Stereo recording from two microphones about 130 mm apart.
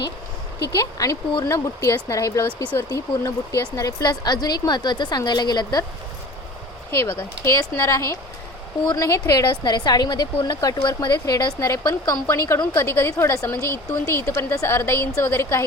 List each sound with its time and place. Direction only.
0.7 s a woman's voice: 25° left (ahead or behind)
6.9 s a woman's voice: 25° left (ahead or behind)